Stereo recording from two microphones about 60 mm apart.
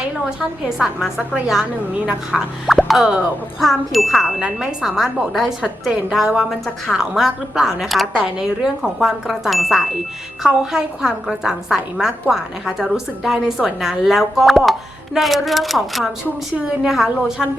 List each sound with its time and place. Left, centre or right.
0.3 s a woman's voice: centre
4.4 s speech: centre
4.8 s a woman's voice: centre